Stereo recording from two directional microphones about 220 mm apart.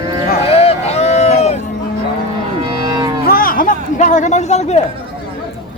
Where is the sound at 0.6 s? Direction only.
30° left (ahead or behind).